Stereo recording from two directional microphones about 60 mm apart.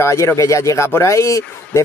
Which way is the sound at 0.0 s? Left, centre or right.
Left.